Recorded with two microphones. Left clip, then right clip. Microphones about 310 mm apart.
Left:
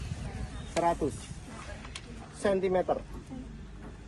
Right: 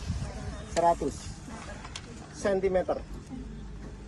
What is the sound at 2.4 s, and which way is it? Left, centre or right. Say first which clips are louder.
Speech: right 1 dB; left.